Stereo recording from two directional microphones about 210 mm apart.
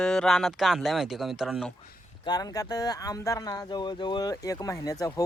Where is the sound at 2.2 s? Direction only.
20° left (ahead or behind).